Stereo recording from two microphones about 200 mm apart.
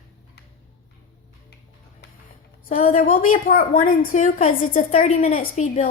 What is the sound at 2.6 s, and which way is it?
A woman's voice, 40° left (ahead or behind).